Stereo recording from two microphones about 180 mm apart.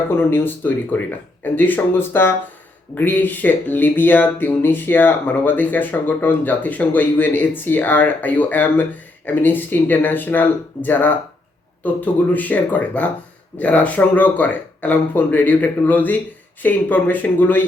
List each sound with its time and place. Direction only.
0.2 s speech: 10° left (ahead or behind)